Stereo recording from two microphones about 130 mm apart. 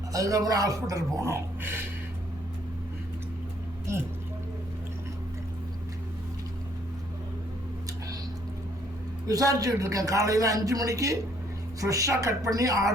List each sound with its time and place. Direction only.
0.1 s a man's voice: 25° right (ahead or behind)
9.2 s a man's voice: 25° right (ahead or behind)